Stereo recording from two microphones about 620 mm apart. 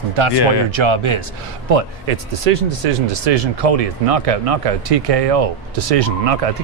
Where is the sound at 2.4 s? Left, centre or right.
Right.